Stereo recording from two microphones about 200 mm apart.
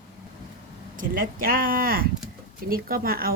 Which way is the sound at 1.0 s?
45° right (ahead or behind).